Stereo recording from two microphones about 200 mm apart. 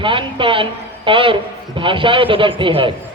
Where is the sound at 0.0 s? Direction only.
25° right (ahead or behind).